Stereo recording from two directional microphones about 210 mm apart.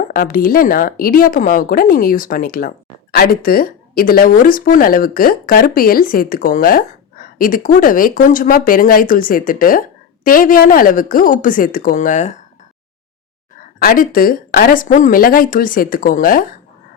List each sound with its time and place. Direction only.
0.1 s speech: 40° left (ahead or behind)
13.7 s speech: 45° left (ahead or behind)